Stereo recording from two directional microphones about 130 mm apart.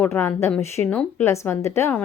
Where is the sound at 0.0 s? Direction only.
15° left (ahead or behind).